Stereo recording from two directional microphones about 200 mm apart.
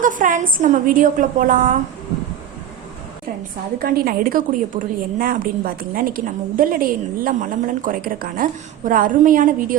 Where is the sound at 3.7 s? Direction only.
50° right (ahead or behind).